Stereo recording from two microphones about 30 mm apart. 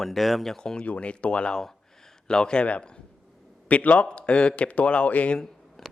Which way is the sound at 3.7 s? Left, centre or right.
Left.